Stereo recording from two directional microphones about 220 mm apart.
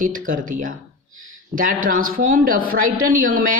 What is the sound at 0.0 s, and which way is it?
Speech, 40° right (ahead or behind).